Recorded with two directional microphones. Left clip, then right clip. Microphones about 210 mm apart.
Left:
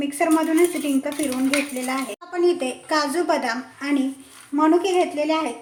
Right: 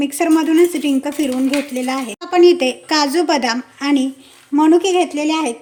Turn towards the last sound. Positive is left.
turn(degrees=-45)  # may be behind; listen again after turning